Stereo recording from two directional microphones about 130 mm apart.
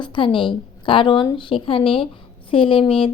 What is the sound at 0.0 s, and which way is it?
A woman's voice, 40° left (ahead or behind).